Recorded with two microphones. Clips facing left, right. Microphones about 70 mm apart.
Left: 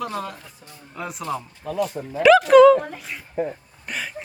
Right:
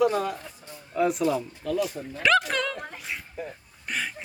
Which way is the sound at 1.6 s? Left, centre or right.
Left.